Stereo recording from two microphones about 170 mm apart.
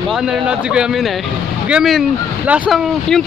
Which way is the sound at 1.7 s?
Centre (ahead or behind).